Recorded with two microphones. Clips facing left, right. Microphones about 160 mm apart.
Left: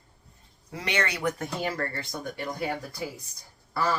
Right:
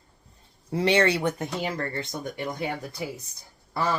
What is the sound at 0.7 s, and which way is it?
Speech, 30° right (ahead or behind).